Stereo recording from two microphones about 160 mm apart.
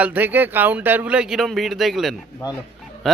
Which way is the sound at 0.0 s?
10° right (ahead or behind).